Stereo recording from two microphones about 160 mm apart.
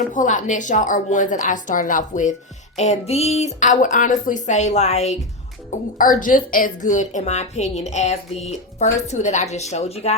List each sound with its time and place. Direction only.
0.1 s a woman's voice: 55° left (ahead or behind)
6.0 s a woman's voice: 55° left (ahead or behind)